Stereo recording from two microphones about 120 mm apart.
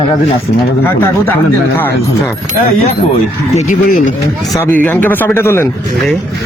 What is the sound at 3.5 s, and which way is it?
Speech, 90° left.